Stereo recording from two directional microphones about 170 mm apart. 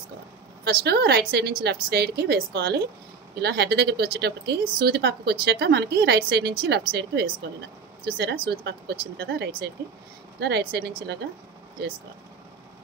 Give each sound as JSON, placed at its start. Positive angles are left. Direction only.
{"t": 0.7, "sound": "speech", "side_deg": -70}